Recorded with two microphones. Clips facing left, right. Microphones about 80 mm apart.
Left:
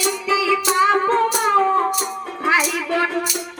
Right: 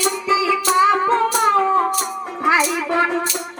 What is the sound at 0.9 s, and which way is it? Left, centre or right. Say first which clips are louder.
Music: right 1 dB; centre.